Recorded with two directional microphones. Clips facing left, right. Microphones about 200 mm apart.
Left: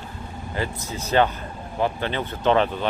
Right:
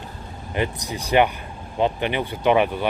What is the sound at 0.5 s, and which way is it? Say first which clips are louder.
Speech: right 4 dB; 20° right (ahead or behind).